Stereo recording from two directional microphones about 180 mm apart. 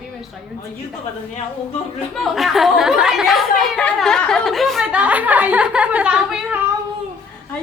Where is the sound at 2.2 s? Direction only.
Centre (ahead or behind).